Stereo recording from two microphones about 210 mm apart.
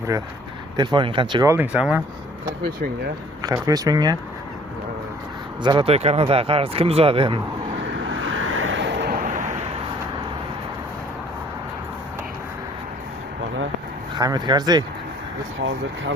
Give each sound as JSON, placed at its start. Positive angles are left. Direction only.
{"t": 0.8, "sound": "speech", "side_deg": -20}
{"t": 3.4, "sound": "speech", "side_deg": -15}
{"t": 5.6, "sound": "speech", "side_deg": -25}
{"t": 8.3, "sound": "vehicle", "side_deg": -70}
{"t": 9.2, "sound": "a sound", "side_deg": -35}
{"t": 14.2, "sound": "speech", "side_deg": -20}